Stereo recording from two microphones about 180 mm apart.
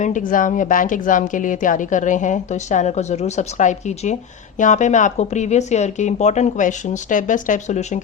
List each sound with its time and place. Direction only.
0.0 s speech: 45° left (ahead or behind)